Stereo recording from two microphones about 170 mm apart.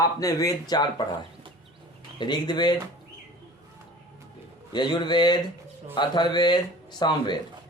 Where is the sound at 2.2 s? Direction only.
25° left (ahead or behind).